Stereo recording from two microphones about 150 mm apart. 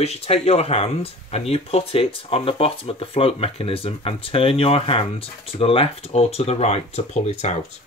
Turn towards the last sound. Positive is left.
turn(degrees=45)  # may be behind; listen again after turning